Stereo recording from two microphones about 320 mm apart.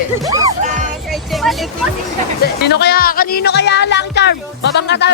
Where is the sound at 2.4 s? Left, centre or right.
Left.